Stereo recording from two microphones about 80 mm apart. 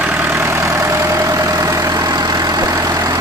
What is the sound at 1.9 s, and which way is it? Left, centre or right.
Vehicle, right.